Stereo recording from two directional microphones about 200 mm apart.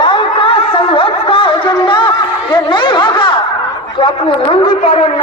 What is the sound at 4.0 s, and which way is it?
A man's voice, 25° left (ahead or behind).